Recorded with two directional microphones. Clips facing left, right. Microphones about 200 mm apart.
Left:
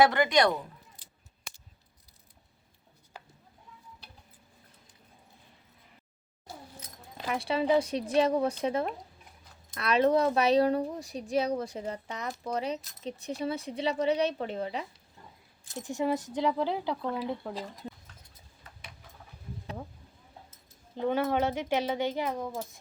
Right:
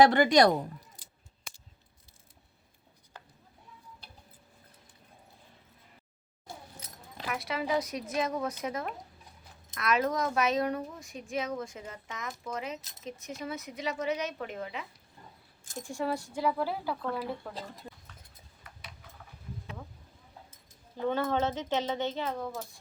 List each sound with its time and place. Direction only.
0.1 s speech: 35° right (ahead or behind)
7.3 s speech: 30° left (ahead or behind)
15.8 s speech: 20° left (ahead or behind)
20.9 s speech: 15° left (ahead or behind)